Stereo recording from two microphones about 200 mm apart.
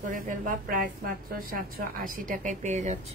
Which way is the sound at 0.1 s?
45° right (ahead or behind).